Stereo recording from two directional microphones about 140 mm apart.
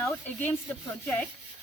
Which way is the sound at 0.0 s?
15° left (ahead or behind).